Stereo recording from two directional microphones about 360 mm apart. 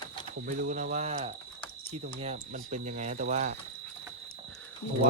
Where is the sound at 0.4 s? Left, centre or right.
Right.